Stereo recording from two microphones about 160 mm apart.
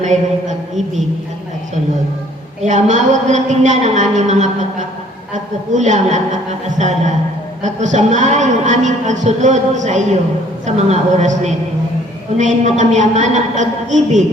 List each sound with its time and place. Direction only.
0.0 s a woman's voice: 50° right (ahead or behind)
2.6 s a woman's voice: 50° right (ahead or behind)